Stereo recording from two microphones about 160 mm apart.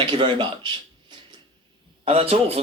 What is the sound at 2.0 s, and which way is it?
Speech, 40° right (ahead or behind).